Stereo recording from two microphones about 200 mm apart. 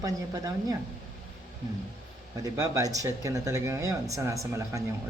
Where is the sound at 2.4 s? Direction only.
15° right (ahead or behind).